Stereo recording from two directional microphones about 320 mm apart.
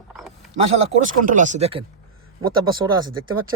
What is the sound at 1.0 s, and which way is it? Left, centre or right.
Speech, right.